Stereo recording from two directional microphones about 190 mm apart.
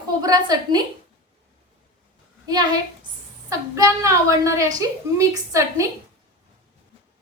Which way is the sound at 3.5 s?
15° right (ahead or behind).